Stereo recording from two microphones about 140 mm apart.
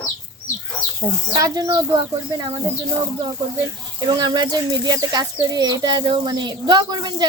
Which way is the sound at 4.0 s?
35° right (ahead or behind).